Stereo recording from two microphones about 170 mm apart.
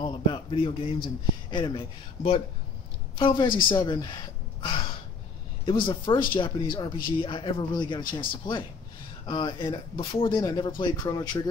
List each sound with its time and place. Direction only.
0.0 s a man's voice: 30° left (ahead or behind)